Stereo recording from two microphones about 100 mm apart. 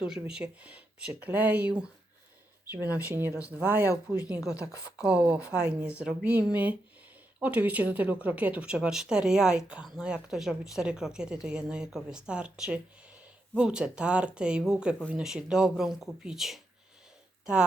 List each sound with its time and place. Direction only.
0.0 s speech: 10° right (ahead or behind)
4.5 s speech: 35° left (ahead or behind)
4.9 s speech: 10° right (ahead or behind)